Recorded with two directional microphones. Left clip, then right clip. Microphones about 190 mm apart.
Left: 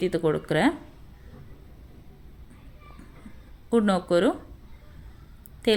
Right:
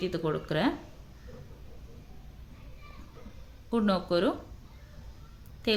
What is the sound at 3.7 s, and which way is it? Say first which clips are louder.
Speech: left 5 dB; 30° left (ahead or behind).